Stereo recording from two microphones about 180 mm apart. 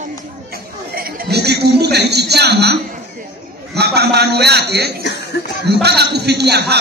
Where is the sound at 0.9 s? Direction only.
55° right (ahead or behind).